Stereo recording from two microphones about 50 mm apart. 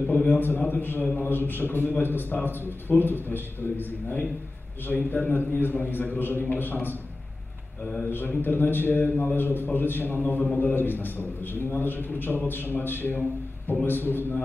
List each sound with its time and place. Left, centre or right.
0.1 s a man's voice: left
8.1 s a man's voice: left